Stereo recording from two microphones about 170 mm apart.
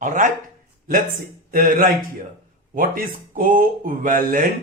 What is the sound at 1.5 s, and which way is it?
Speech, 55° right (ahead or behind).